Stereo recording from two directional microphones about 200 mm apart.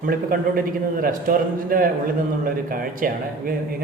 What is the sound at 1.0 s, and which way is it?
Speech, 45° right (ahead or behind).